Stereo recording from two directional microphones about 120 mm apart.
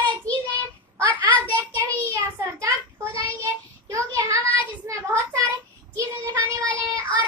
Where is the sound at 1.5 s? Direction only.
25° right (ahead or behind).